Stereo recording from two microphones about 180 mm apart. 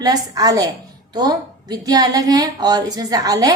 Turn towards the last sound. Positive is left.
turn(degrees=-20)  # may be behind; listen again after turning